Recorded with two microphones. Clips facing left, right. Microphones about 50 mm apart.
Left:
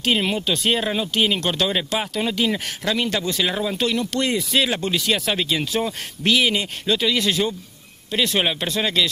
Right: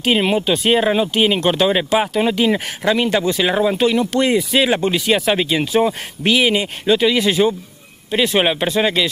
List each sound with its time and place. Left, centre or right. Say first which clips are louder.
0.0 s speech: right 5 dB; centre